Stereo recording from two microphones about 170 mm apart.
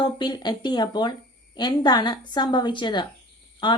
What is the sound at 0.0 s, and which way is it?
Speech, 25° left (ahead or behind).